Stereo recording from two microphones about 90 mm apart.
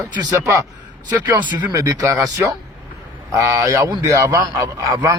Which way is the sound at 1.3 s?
50° right (ahead or behind).